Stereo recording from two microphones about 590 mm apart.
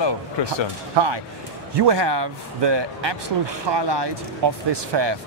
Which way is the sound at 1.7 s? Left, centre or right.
Right.